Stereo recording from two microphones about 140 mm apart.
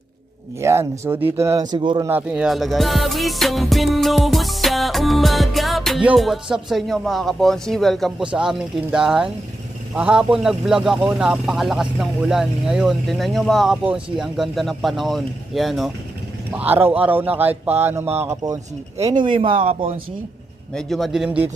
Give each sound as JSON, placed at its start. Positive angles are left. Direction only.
{"t": 0.6, "sound": "speech", "side_deg": -20}
{"t": 2.0, "sound": "music", "side_deg": -10}
{"t": 16.5, "sound": "speech", "side_deg": -10}
{"t": 19.2, "sound": "speech", "side_deg": -35}
{"t": 19.6, "sound": "speech", "side_deg": -45}
{"t": 20.7, "sound": "music", "side_deg": 0}